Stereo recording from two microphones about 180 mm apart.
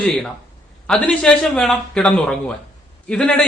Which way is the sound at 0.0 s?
Centre (ahead or behind).